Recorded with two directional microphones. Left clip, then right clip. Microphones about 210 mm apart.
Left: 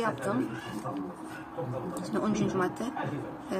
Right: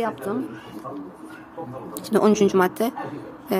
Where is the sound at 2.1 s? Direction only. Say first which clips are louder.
Right 13 dB; 55° right (ahead or behind).